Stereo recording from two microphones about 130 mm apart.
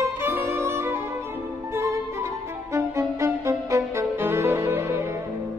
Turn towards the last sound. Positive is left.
turn(degrees=-20)  # may be behind; listen again after turning